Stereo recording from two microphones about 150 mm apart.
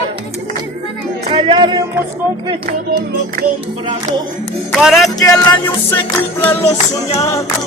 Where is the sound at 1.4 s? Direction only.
35° right (ahead or behind).